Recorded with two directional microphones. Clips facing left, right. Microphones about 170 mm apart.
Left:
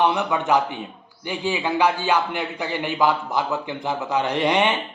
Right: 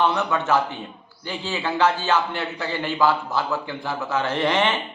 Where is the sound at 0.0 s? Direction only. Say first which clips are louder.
Left 1 dB; 15° left (ahead or behind).